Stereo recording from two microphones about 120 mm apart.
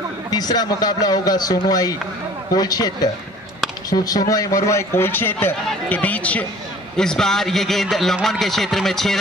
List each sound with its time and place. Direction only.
0.3 s a man's voice: 35° left (ahead or behind); by 9.2 s centre (ahead or behind)